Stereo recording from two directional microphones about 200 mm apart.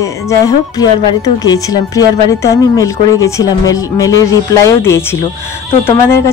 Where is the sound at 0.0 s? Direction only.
15° left (ahead or behind).